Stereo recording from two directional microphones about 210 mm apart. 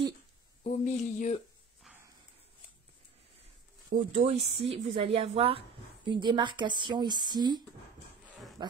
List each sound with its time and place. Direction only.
0.7 s a sound: 35° left (ahead or behind)
4.1 s speech: 30° right (ahead or behind)
8.6 s insect: 20° right (ahead or behind)